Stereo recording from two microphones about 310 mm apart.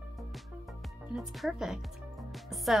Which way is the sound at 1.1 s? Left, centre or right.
Centre.